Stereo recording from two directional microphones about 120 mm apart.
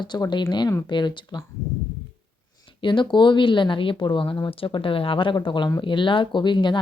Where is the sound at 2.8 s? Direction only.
40° left (ahead or behind).